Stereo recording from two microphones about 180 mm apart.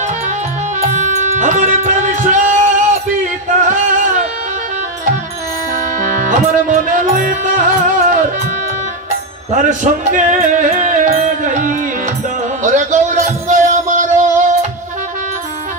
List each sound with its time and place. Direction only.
0.7 s music: 40° right (ahead or behind)
5.9 s music: 45° right (ahead or behind)